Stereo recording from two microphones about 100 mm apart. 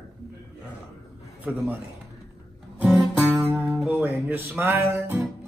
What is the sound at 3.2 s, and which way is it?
Music, 15° right (ahead or behind).